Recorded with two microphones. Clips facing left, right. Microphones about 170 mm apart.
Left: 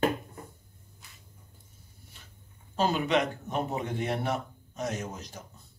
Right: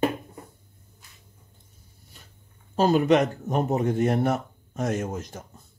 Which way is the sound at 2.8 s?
45° right (ahead or behind).